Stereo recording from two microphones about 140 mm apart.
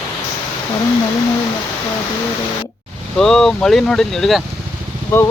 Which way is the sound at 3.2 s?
5° left (ahead or behind).